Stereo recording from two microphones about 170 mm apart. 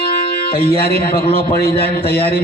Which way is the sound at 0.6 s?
65° left (ahead or behind).